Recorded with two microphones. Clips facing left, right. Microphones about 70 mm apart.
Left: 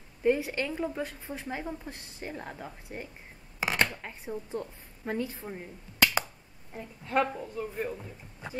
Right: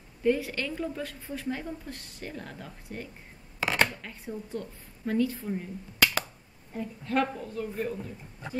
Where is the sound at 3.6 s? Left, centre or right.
Centre.